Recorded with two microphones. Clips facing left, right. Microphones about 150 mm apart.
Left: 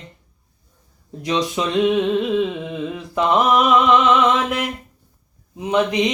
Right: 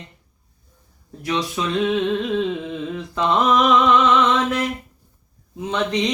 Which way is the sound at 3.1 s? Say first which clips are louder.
Left 2 dB; 10° left (ahead or behind).